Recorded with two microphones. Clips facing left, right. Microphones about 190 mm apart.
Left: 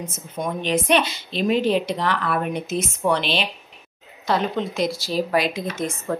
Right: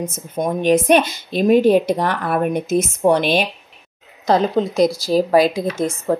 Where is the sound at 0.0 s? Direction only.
45° right (ahead or behind).